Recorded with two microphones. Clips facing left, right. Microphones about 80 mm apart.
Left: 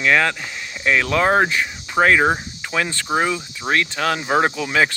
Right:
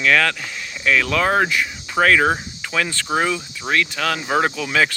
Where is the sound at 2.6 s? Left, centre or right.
Left.